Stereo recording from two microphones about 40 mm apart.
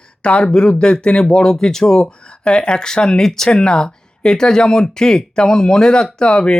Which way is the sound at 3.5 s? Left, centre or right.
Left.